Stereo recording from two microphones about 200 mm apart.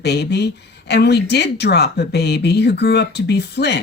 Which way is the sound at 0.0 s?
55° left (ahead or behind).